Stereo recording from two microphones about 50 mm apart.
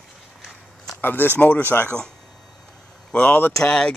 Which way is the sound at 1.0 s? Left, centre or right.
Left.